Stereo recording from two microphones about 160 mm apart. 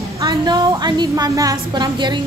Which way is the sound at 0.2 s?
25° right (ahead or behind).